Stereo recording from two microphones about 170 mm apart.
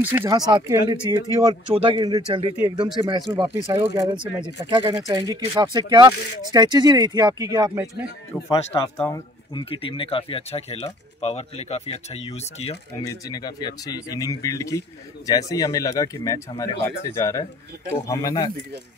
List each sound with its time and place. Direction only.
0.0 s speech: 10° right (ahead or behind)
0.5 s speech: 25° right (ahead or behind)
8.5 s speech: 20° left (ahead or behind)
9.5 s speech: 30° left (ahead or behind)
13.0 s speech: 20° left (ahead or behind)